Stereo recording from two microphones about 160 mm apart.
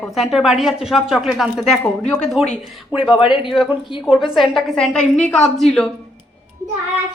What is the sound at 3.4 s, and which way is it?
A woman's voice, centre (ahead or behind).